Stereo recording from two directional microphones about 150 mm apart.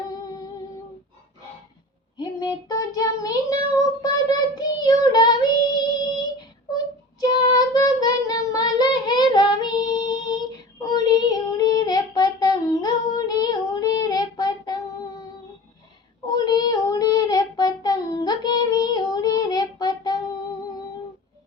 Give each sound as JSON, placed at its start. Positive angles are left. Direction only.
{"t": 2.1, "sound": "child singing", "side_deg": 25}
{"t": 7.2, "sound": "child singing", "side_deg": 25}
{"t": 16.2, "sound": "child singing", "side_deg": 25}